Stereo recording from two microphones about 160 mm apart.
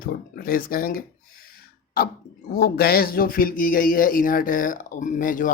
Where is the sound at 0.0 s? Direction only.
65° left (ahead or behind).